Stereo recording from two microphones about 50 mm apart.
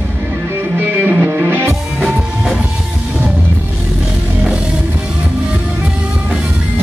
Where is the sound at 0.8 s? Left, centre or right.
Right.